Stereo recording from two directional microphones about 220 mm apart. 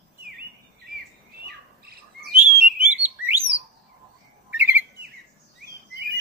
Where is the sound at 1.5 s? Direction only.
45° right (ahead or behind).